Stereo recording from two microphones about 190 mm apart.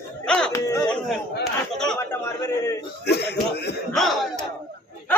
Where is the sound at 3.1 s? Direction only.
60° left (ahead or behind).